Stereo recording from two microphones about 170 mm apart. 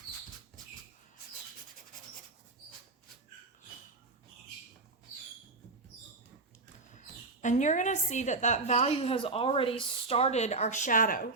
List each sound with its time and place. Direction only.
7.4 s a woman's voice: 45° left (ahead or behind)